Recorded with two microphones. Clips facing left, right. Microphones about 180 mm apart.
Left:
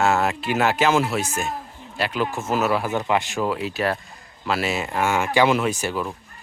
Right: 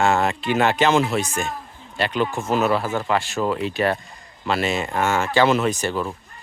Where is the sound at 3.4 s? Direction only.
5° left (ahead or behind).